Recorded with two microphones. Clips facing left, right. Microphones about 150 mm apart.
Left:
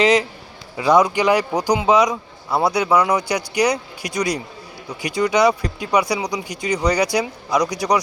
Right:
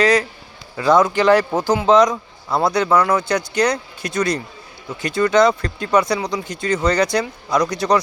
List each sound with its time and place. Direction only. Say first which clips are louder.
0.0 s a man's voice: even; 20° left (ahead or behind)